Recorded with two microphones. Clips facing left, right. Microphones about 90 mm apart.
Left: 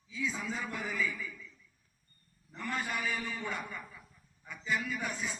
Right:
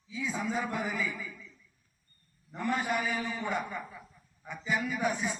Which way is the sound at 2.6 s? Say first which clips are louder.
Right 6 dB; 15° right (ahead or behind).